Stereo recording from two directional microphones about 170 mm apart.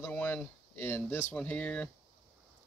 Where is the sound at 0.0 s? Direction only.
10° left (ahead or behind).